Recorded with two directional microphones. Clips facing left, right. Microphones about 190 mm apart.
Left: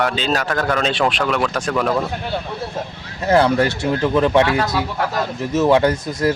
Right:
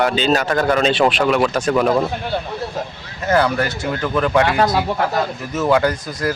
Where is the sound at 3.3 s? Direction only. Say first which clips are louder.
Left 2 dB; 25° left (ahead or behind).